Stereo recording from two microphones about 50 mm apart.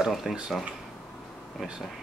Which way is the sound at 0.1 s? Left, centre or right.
Centre.